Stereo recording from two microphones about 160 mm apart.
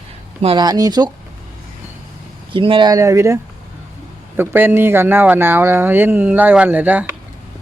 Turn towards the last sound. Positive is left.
turn(degrees=-10)  # may be behind; listen again after turning